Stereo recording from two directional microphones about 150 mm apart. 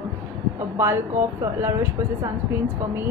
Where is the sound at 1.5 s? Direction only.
15° right (ahead or behind).